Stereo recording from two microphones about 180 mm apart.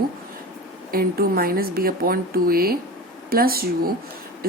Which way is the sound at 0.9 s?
55° right (ahead or behind).